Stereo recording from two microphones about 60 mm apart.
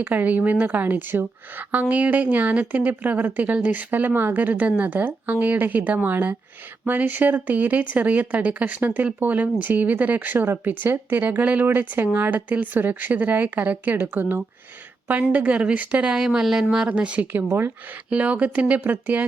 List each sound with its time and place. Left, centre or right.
0.0 s a woman's voice: right
15.3 s a woman's voice: right
16.1 s speech: centre
16.6 s speech: centre
17.3 s speech: right
18.1 s a woman's voice: right